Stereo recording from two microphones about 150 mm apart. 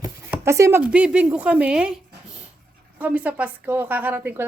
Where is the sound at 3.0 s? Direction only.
10° right (ahead or behind).